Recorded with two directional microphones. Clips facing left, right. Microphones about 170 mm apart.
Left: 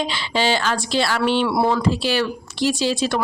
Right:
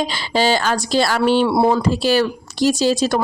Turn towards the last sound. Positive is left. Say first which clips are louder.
# right 4 dB
turn(degrees=-40)  # may be behind; listen again after turning